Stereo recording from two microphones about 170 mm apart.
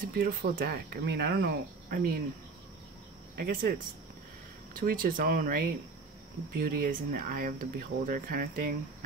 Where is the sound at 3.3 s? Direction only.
65° right (ahead or behind).